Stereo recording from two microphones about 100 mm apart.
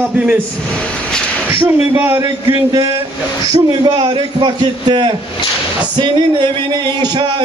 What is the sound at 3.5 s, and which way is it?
A man's voice, 50° right (ahead or behind).